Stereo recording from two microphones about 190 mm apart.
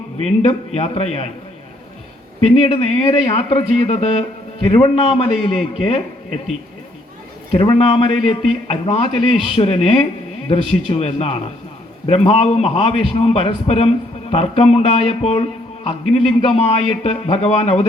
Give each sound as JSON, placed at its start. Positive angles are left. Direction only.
{"t": 0.2, "sound": "a man's voice", "side_deg": 35}
{"t": 2.4, "sound": "a man's voice", "side_deg": 30}
{"t": 7.5, "sound": "a man's voice", "side_deg": 30}